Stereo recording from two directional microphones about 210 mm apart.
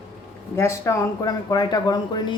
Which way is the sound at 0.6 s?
15° left (ahead or behind).